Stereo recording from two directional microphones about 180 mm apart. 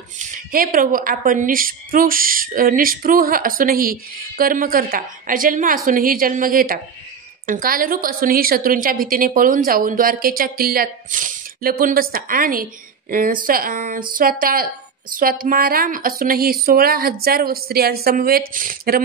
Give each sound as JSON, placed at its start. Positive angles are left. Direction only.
{"t": 0.2, "sound": "a woman's voice", "side_deg": -50}